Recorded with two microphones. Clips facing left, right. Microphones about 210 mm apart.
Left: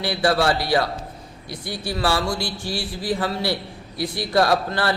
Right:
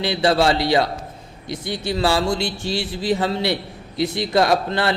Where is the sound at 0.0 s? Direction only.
20° right (ahead or behind).